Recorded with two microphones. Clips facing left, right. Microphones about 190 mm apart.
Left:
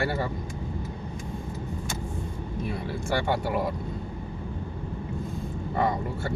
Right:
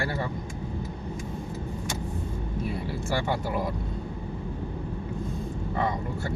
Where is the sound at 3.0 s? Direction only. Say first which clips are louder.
Left 2 dB; centre (ahead or behind).